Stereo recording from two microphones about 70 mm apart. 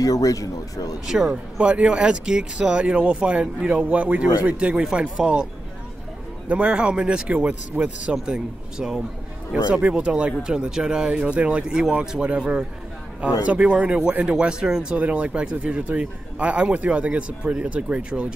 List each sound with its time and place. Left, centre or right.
0.0 s speech: left
1.0 s speech: centre
6.5 s speech: centre